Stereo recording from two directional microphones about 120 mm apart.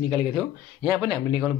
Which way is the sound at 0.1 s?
35° right (ahead or behind).